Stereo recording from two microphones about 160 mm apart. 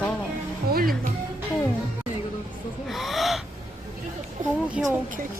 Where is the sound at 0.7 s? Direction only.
70° right (ahead or behind).